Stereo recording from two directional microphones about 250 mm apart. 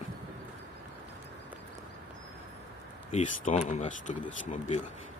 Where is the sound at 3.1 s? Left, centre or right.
Left.